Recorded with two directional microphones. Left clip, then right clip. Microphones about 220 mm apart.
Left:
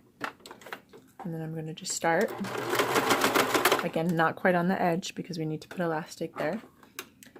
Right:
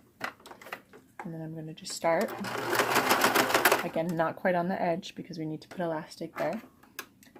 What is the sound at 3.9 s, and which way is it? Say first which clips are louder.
Speech: left 2 dB; 40° left (ahead or behind).